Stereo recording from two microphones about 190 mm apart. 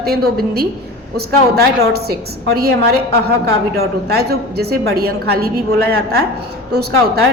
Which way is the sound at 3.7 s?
55° right (ahead or behind).